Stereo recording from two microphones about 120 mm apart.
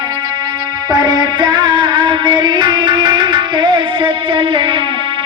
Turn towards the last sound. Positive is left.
turn(degrees=-45)  # may be behind; listen again after turning